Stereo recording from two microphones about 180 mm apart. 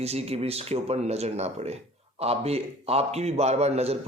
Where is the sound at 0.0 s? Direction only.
35° right (ahead or behind).